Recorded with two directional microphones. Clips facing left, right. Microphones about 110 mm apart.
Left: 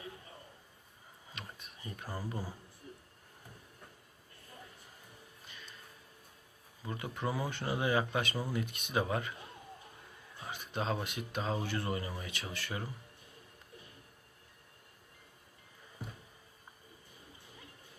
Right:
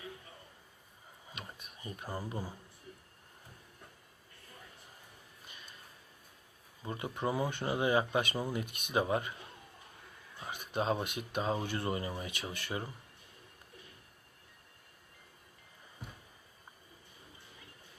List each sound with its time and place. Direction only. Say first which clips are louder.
1.3 s a sound: right 1 dB; 15° right (ahead or behind)
6.8 s speech: right 2 dB; 25° right (ahead or behind)
10.4 s speech: right 3 dB; 15° right (ahead or behind)